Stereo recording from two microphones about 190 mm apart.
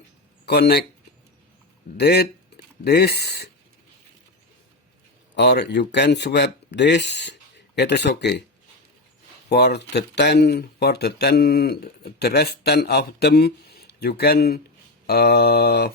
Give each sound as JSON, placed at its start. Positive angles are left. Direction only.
{"t": 0.4, "sound": "speech", "side_deg": 60}
{"t": 2.0, "sound": "speech", "side_deg": 55}
{"t": 5.3, "sound": "speech", "side_deg": 65}
{"t": 9.5, "sound": "speech", "side_deg": 60}